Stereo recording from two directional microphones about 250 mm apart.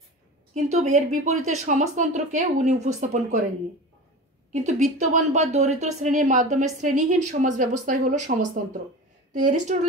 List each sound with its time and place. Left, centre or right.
0.6 s speech: right
4.5 s a woman's voice: right
9.5 s a woman's voice: right